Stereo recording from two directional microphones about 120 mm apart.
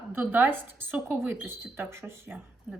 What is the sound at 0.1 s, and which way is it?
A woman's voice, 15° right (ahead or behind).